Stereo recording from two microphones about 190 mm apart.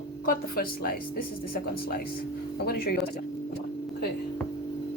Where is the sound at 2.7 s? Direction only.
55° left (ahead or behind).